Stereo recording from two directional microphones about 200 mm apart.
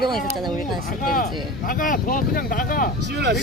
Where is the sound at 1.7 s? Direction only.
45° left (ahead or behind).